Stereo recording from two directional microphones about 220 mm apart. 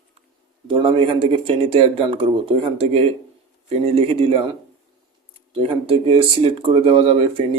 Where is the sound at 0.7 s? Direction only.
25° right (ahead or behind).